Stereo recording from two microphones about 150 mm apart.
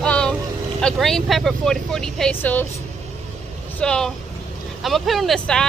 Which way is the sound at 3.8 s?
5° left (ahead or behind).